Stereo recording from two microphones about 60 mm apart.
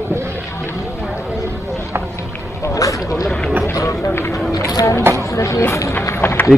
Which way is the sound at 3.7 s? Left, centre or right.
Left.